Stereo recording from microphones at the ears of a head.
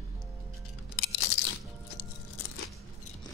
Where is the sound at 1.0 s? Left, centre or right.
Left.